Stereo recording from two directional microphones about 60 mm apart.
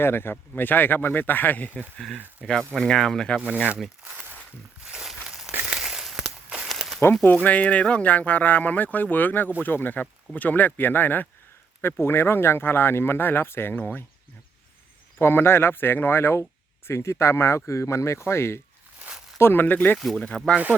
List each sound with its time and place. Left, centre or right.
0.0 s speech: left
2.4 s speech: centre
3.5 s speech: right
4.0 s a sound: right
4.9 s a sound: centre
7.4 s speech: left
12.0 s speech: left
15.2 s speech: left
18.9 s a sound: centre
19.4 s speech: left
20.1 s speech: centre